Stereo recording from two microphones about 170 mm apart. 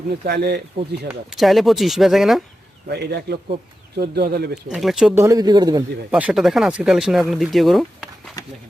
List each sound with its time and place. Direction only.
0.1 s speech: 70° right (ahead or behind)
1.0 s speech: centre (ahead or behind)
2.9 s speech: 75° right (ahead or behind)
4.5 s speech: centre (ahead or behind)
5.1 s speech: 15° right (ahead or behind)
6.1 s speech: 5° right (ahead or behind)